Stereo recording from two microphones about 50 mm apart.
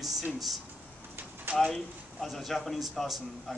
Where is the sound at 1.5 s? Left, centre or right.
Right.